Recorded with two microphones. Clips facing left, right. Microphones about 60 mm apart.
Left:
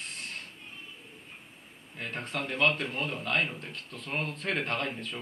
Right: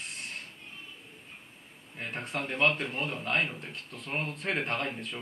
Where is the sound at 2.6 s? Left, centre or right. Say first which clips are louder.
Even; centre.